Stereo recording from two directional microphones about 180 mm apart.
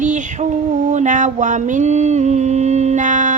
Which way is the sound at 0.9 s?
45° right (ahead or behind).